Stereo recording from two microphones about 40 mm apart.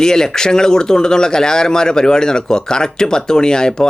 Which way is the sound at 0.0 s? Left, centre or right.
Centre.